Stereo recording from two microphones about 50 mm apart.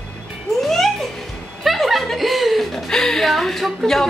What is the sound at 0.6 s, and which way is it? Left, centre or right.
Music, centre.